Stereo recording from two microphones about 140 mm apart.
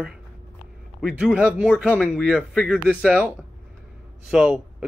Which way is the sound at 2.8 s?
10° left (ahead or behind).